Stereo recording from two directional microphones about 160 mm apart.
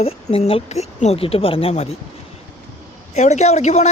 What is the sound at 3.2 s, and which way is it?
Speech, 45° left (ahead or behind).